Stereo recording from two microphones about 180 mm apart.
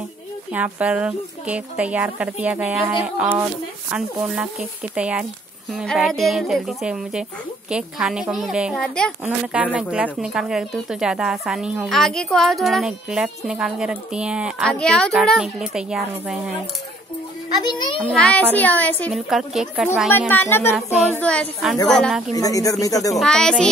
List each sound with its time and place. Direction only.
0.5 s speech: 10° right (ahead or behind)
17.6 s a woman's voice: 25° left (ahead or behind)
18.0 s speech: 5° left (ahead or behind)
20.1 s speech: 10° left (ahead or behind)
22.3 s a woman's voice: 20° left (ahead or behind)
23.1 s speech: 5° left (ahead or behind)